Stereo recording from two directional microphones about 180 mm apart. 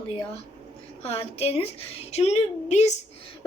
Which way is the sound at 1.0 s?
35° left (ahead or behind).